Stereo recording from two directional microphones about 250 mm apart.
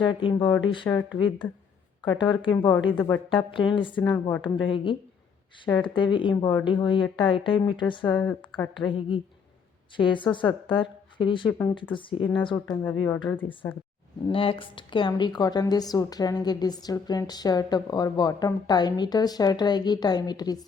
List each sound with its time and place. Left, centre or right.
0.0 s a woman's voice: centre
2.1 s speech: centre
4.0 s a woman's voice: centre
4.7 s speech: centre
8.0 s a woman's voice: centre
8.7 s speech: centre
12.7 s a woman's voice: centre